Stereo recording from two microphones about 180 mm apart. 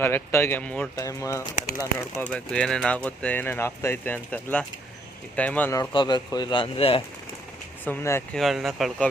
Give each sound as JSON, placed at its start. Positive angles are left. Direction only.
{"t": 0.0, "sound": "speech", "side_deg": 15}
{"t": 0.9, "sound": "speech", "side_deg": 15}
{"t": 1.8, "sound": "speech", "side_deg": -15}
{"t": 2.3, "sound": "speech", "side_deg": 5}
{"t": 5.9, "sound": "speech", "side_deg": 25}
{"t": 7.9, "sound": "speech", "side_deg": 10}
{"t": 8.4, "sound": "speech", "side_deg": 0}